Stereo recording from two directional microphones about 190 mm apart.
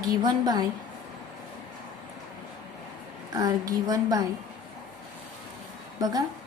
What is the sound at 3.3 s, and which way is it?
Speech, 20° right (ahead or behind).